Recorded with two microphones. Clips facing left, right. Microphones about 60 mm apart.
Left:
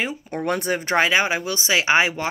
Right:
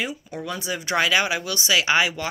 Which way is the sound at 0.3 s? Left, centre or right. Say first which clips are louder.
Left 6 dB; left.